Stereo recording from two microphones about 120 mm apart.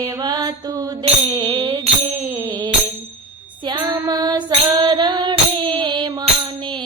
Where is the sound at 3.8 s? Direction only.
30° right (ahead or behind).